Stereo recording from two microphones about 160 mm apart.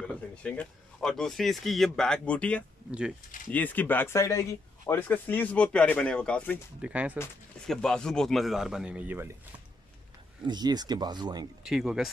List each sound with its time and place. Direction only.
0.0 s speech: 5° left (ahead or behind)
6.8 s speech: 10° right (ahead or behind)
7.6 s speech: 5° left (ahead or behind)
10.4 s speech: 25° right (ahead or behind)
11.6 s speech: 5° right (ahead or behind)